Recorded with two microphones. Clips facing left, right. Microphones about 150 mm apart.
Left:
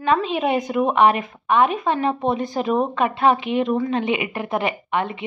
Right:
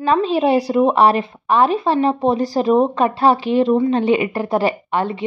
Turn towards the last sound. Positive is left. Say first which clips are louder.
# right 3 dB
turn(degrees=-35)  # may be behind; listen again after turning